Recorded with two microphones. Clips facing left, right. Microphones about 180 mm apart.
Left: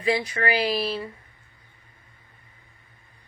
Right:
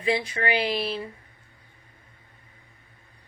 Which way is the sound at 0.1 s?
25° right (ahead or behind).